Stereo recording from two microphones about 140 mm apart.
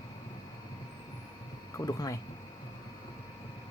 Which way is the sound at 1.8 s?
25° left (ahead or behind).